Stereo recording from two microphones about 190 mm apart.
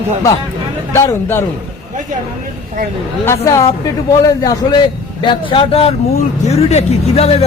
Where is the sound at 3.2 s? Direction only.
15° left (ahead or behind); by 7.3 s 35° left (ahead or behind).